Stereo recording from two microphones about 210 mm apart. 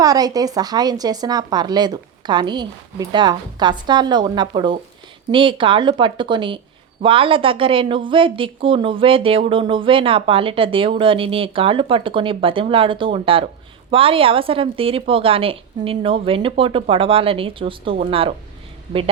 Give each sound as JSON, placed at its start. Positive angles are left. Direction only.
{"t": 0.0, "sound": "a woman's voice", "side_deg": -15}